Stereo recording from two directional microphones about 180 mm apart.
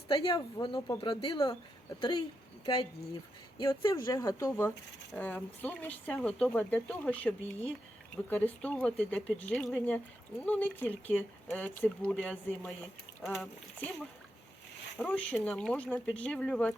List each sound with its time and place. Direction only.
0.1 s a woman's voice: 25° left (ahead or behind)
3.6 s speech: 20° left (ahead or behind)